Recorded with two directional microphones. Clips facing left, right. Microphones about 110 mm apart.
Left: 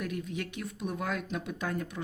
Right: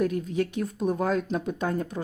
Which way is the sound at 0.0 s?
35° right (ahead or behind).